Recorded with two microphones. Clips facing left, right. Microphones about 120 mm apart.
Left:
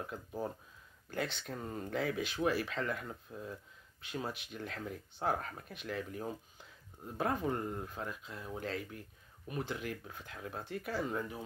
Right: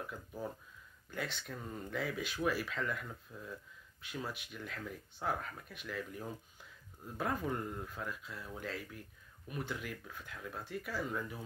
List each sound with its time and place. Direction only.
0.0 s speech: 30° left (ahead or behind)